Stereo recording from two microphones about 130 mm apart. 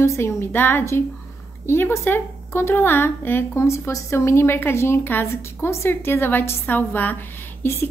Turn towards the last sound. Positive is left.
turn(degrees=20)  # may be behind; listen again after turning